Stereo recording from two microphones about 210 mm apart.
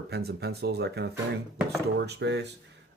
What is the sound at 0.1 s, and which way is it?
Speech, 50° right (ahead or behind).